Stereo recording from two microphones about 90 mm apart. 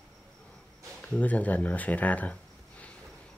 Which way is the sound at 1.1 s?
15° left (ahead or behind).